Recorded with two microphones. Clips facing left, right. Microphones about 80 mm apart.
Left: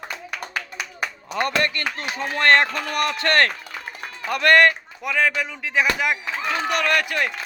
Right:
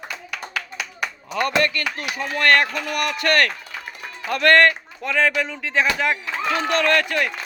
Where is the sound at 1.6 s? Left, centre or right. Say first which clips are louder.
Right 1 dB; left.